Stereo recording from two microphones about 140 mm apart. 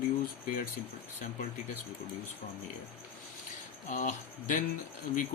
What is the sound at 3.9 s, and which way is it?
Speech, 65° left (ahead or behind).